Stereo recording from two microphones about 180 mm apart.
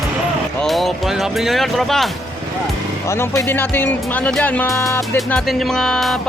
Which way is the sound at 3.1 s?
15° left (ahead or behind).